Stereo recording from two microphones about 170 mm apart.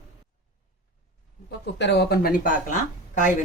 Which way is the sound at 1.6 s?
90° left.